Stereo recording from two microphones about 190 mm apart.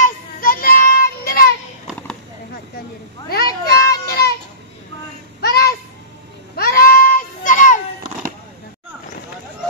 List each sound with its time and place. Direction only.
0.0 s child singing: 50° left (ahead or behind)
3.3 s children playing: 55° left (ahead or behind)
5.4 s music: 55° left (ahead or behind)
6.5 s a sound: 55° left (ahead or behind)